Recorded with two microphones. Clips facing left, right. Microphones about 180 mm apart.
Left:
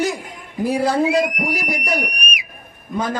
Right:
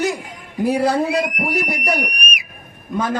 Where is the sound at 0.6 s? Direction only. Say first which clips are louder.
Even; 65° right (ahead or behind).